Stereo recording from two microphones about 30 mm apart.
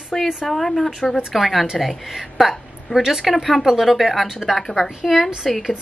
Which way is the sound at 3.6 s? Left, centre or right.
Centre.